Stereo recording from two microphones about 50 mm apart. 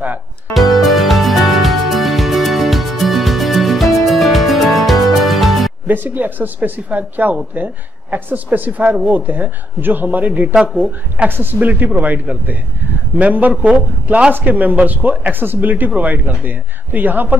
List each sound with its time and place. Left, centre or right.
0.6 s music: centre
5.9 s speech: right
11.2 s a woman's voice: right